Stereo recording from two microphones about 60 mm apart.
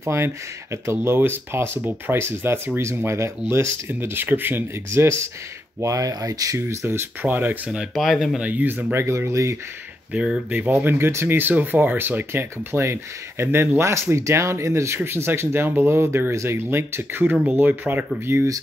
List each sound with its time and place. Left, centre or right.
0.0 s speech: right
4.1 s speech: right
5.0 s speech: right
5.8 s speech: right
7.6 s speech: centre
7.9 s speech: centre
8.4 s speech: right
8.9 s speech: right
10.1 s speech: centre
10.8 s speech: right
17.6 s speech: right